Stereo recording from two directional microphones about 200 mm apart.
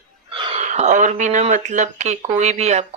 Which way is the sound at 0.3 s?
25° right (ahead or behind).